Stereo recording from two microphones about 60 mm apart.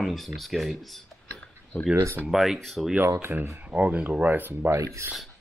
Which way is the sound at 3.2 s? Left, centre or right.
Right.